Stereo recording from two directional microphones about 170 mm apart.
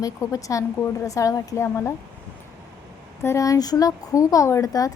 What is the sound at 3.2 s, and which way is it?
Speech, 20° left (ahead or behind).